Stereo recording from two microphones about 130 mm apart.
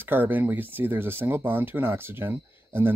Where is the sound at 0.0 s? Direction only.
15° right (ahead or behind).